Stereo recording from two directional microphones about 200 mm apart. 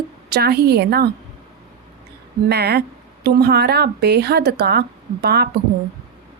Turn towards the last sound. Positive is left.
turn(degrees=-55)  # may be behind; listen again after turning